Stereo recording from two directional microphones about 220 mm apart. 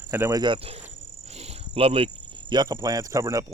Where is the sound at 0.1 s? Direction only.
10° right (ahead or behind).